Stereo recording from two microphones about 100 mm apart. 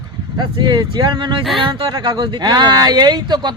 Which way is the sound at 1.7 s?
50° right (ahead or behind).